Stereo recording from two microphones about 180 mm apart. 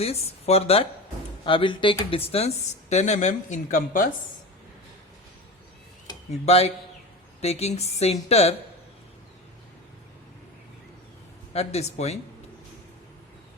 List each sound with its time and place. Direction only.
0.0 s a woman's voice: 35° left (ahead or behind)
6.4 s a woman's voice: 35° left (ahead or behind)
11.5 s a woman's voice: 35° left (ahead or behind)